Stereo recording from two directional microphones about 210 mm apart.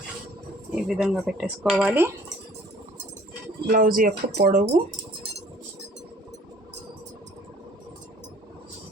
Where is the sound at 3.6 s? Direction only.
40° right (ahead or behind).